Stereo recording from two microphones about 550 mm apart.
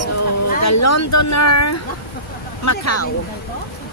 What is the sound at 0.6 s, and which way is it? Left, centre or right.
Speech, left.